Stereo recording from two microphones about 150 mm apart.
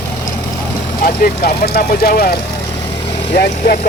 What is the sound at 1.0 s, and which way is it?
Speech, 85° left.